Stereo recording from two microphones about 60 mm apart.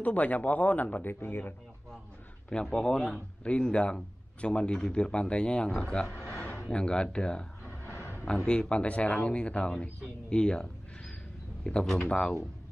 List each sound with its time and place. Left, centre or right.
0.0 s speech: left
1.2 s speech: left
2.5 s a man's voice: centre
8.5 s a man's voice: centre
10.3 s a sound: centre
11.8 s speech: centre
12.1 s a man's voice: centre